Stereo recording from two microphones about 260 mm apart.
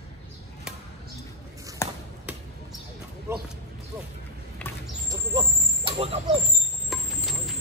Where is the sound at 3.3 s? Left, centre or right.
Centre.